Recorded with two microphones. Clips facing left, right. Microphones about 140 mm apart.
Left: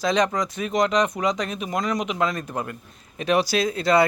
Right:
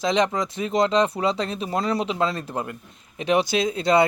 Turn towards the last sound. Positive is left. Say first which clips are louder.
# even
turn(degrees=-25)  # may be behind; listen again after turning